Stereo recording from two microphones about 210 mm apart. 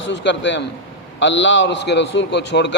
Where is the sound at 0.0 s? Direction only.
55° left (ahead or behind).